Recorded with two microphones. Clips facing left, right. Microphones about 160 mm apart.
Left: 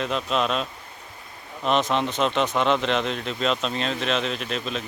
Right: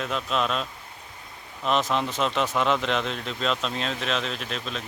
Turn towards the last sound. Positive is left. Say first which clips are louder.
# left 4 dB
turn(degrees=0)  # may be behind; listen again after turning